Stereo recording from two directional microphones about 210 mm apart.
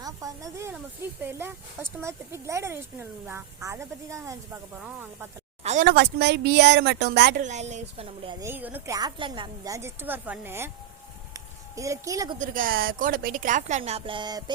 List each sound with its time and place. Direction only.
0.0 s a sound: 15° right (ahead or behind)
1.2 s speech: 10° right (ahead or behind)
5.6 s a woman's voice: 35° right (ahead or behind)
5.9 s speech: 50° right (ahead or behind)
7.4 s speech: 35° right (ahead or behind)
8.4 s speech: 10° right (ahead or behind)
11.3 s a sound: 15° right (ahead or behind)
12.4 s speech: 40° right (ahead or behind); by 14.5 s 20° right (ahead or behind)